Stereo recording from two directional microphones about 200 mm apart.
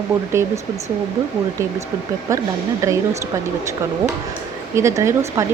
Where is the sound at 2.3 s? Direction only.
15° right (ahead or behind).